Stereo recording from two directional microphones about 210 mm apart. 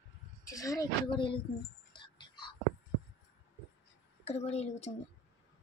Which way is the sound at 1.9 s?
20° left (ahead or behind).